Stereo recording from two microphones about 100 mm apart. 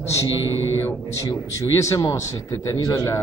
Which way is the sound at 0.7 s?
25° left (ahead or behind).